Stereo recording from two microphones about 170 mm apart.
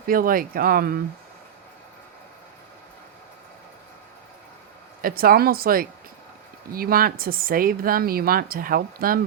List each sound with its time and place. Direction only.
0.0 s speech: 55° right (ahead or behind)
5.0 s speech: 60° right (ahead or behind)